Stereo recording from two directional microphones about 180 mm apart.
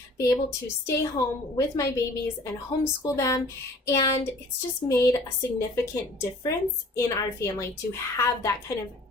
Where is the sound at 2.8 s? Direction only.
15° left (ahead or behind).